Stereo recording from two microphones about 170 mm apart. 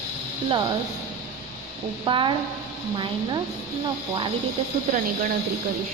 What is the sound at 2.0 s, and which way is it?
Speech, 30° right (ahead or behind).